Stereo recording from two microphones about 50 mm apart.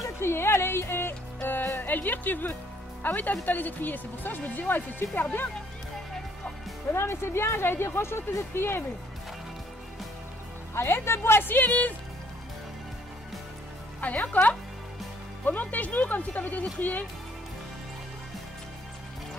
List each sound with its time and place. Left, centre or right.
0.2 s speech: left
6.9 s speech: left
10.7 s a woman's voice: left
14.0 s speech: left